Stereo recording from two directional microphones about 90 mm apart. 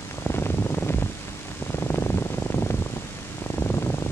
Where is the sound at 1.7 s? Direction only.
30° left (ahead or behind).